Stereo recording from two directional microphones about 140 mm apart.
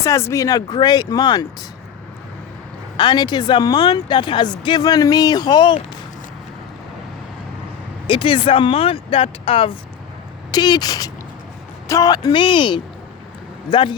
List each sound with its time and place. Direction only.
0.0 s speech: 20° left (ahead or behind)
3.0 s speech: 30° left (ahead or behind)
8.0 s speech: 35° left (ahead or behind)
10.5 s speech: 30° left (ahead or behind)